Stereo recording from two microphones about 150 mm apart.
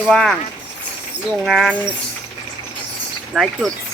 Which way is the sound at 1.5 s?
Centre (ahead or behind).